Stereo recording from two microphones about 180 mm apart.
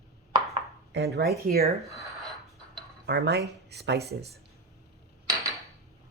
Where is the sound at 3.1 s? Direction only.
65° right (ahead or behind).